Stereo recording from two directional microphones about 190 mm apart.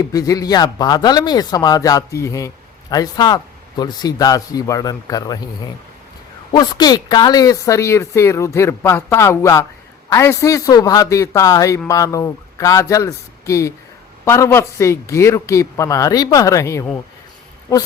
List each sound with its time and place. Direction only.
0.0 s speech: 20° left (ahead or behind)
6.5 s speech: 20° left (ahead or behind)